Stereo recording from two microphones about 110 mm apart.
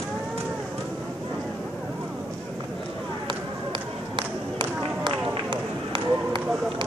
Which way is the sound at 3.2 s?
45° right (ahead or behind).